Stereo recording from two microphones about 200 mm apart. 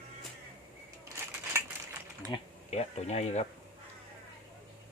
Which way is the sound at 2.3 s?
30° left (ahead or behind).